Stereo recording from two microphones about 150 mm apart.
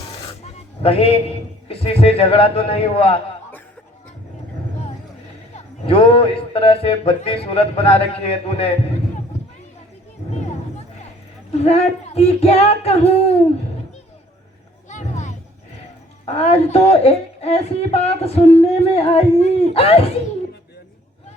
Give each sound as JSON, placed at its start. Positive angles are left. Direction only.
{"t": 0.4, "sound": "a man's voice", "side_deg": 40}
{"t": 5.5, "sound": "a man's voice", "side_deg": 40}
{"t": 10.2, "sound": "a sound", "side_deg": 50}
{"t": 11.5, "sound": "a woman's voice", "side_deg": 45}
{"t": 14.8, "sound": "a sound", "side_deg": 55}
{"t": 16.2, "sound": "a woman's voice", "side_deg": 45}